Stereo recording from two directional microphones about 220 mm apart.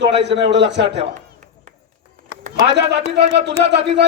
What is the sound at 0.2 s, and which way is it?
Speech, 50° right (ahead or behind).